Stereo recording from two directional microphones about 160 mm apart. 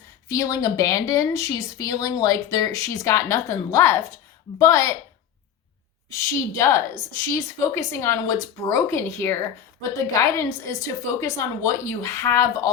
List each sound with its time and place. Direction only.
0.3 s speech: 20° left (ahead or behind)
6.3 s a woman's voice: 20° left (ahead or behind)